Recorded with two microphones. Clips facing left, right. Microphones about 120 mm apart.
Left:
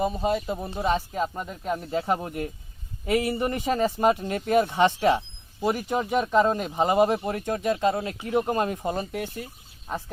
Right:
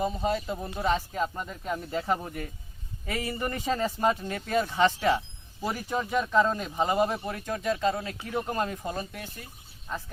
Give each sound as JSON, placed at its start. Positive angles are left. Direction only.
{"t": 0.0, "sound": "speech", "side_deg": 20}